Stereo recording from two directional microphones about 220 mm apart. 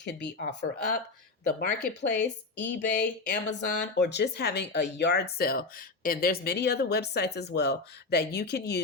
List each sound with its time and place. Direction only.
0.0 s speech: 50° left (ahead or behind)
2.0 s speech: 50° left (ahead or behind)